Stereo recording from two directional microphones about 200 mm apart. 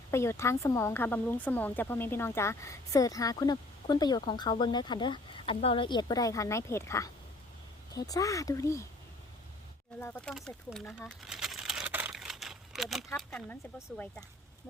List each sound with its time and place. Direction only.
0.1 s speech: 15° left (ahead or behind)
10.0 s speech: 5° left (ahead or behind)
11.1 s crumpling: centre (ahead or behind)
13.1 s speech: centre (ahead or behind)